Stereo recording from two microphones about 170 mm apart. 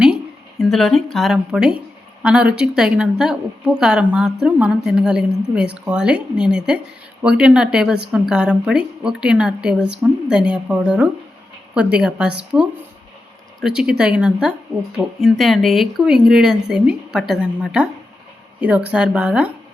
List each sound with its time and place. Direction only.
0.6 s a woman's voice: centre (ahead or behind)